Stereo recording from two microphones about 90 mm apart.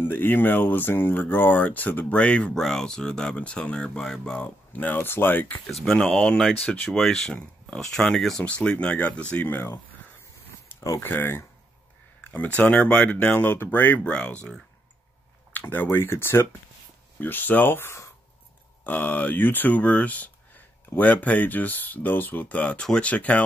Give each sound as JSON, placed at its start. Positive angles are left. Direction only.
{"t": 0.0, "sound": "speech", "side_deg": 20}
{"t": 5.7, "sound": "speech", "side_deg": 5}
{"t": 18.9, "sound": "speech", "side_deg": 20}